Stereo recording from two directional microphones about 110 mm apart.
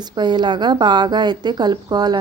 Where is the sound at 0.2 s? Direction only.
40° right (ahead or behind).